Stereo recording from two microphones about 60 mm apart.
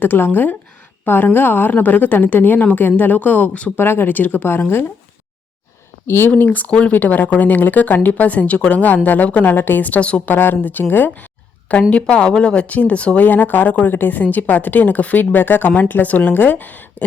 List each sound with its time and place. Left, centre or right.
0.0 s a woman's voice: left
3.8 s a woman's voice: left
6.1 s a woman's voice: left
6.4 s speech: left
10.3 s a woman's voice: left